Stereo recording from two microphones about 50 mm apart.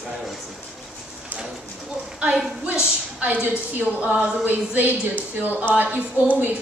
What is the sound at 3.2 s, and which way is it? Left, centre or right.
A woman's voice, right.